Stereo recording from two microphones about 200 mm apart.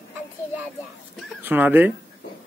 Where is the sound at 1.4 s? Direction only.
10° right (ahead or behind).